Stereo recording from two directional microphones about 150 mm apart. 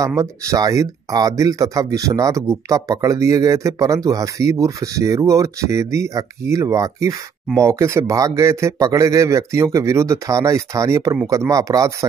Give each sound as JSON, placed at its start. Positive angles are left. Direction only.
{"t": 0.0, "sound": "speech", "side_deg": -20}